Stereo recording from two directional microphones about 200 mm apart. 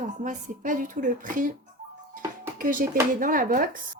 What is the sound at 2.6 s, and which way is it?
Speech, 45° right (ahead or behind).